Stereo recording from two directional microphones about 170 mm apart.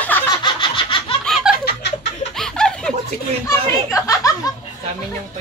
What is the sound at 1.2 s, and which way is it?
Snicker, centre (ahead or behind).